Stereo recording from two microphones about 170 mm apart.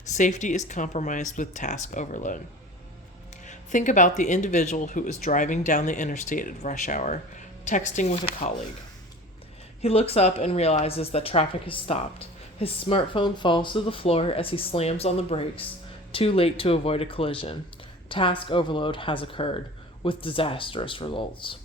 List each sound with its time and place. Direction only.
0.1 s speech: 45° left (ahead or behind)
3.4 s speech: 45° left (ahead or behind)
9.8 s speech: 35° left (ahead or behind)